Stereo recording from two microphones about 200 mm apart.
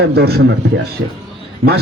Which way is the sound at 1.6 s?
90° right.